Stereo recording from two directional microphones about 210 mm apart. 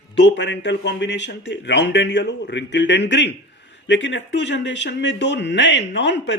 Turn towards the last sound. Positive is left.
turn(degrees=60)  # may be behind; listen again after turning